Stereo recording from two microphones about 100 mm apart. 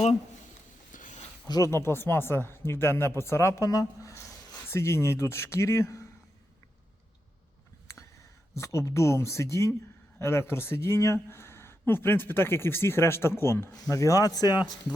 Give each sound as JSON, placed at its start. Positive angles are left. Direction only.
{"t": 1.5, "sound": "speech", "side_deg": 40}
{"t": 1.7, "sound": "speech", "side_deg": 25}
{"t": 8.5, "sound": "speech", "side_deg": 30}